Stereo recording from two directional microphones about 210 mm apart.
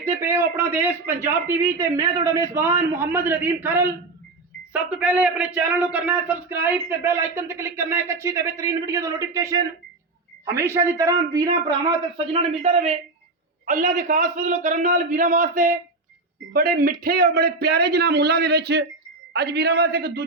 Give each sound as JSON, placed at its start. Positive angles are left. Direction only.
{"t": 0.0, "sound": "a man's voice", "side_deg": -10}